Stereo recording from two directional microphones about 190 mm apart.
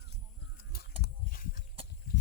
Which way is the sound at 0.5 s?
55° left (ahead or behind).